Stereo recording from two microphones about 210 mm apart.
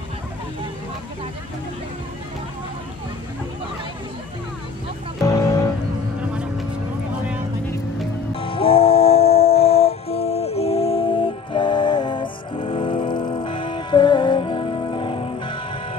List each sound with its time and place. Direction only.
5.2 s music: 15° left (ahead or behind)
8.4 s music: 25° left (ahead or behind)